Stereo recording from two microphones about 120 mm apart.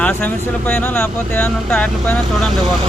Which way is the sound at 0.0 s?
10° left (ahead or behind).